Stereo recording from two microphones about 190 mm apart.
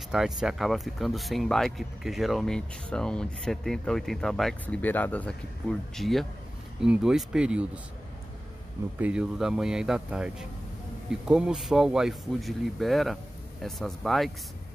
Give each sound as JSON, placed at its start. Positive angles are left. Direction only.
{"t": 0.1, "sound": "speech", "side_deg": -5}
{"t": 8.9, "sound": "speech", "side_deg": -5}